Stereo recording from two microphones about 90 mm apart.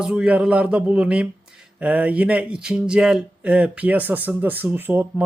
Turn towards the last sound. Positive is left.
turn(degrees=-20)  # may be behind; listen again after turning